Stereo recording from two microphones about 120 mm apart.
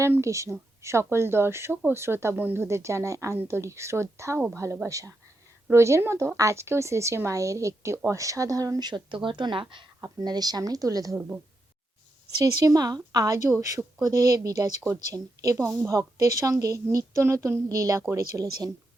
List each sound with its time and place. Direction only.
0.0 s speech: 25° right (ahead or behind); by 9.8 s 45° right (ahead or behind)
10.0 s speech: 30° right (ahead or behind)
12.4 s speech: 30° right (ahead or behind)